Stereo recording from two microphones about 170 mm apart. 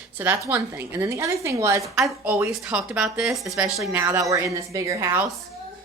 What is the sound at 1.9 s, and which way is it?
A woman's voice, 5° right (ahead or behind).